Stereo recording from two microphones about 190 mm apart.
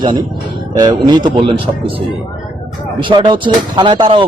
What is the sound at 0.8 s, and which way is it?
Speech, 20° right (ahead or behind).